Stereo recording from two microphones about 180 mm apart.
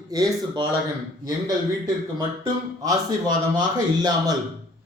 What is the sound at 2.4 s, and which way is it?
A man's voice, 20° right (ahead or behind).